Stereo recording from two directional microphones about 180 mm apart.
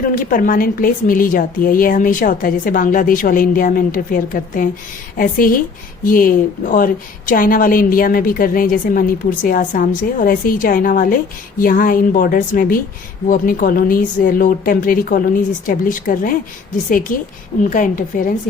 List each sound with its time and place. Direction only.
0.0 s a woman's voice: 50° left (ahead or behind)